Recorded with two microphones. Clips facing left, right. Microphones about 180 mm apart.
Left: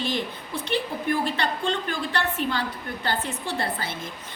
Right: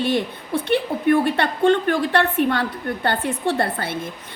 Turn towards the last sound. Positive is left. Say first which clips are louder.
# right 7 dB
turn(degrees=-55)  # may be behind; listen again after turning